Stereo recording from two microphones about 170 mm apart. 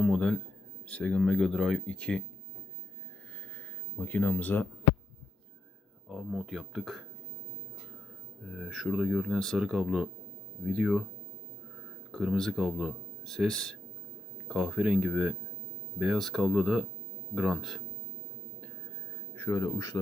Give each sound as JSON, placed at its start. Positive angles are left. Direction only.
{"t": 0.0, "sound": "a sound", "side_deg": 5}
{"t": 0.9, "sound": "speech", "side_deg": 5}
{"t": 4.0, "sound": "speech", "side_deg": 10}
{"t": 6.1, "sound": "speech", "side_deg": -5}
{"t": 8.5, "sound": "speech", "side_deg": 0}
{"t": 12.1, "sound": "speech", "side_deg": 0}
{"t": 19.4, "sound": "speech", "side_deg": 20}